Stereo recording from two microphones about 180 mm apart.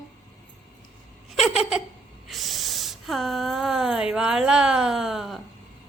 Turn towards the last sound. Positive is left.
turn(degrees=0)  # may be behind; listen again after turning